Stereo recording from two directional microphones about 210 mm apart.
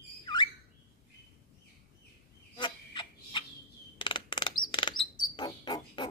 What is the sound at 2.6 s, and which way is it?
Fowl, 20° left (ahead or behind).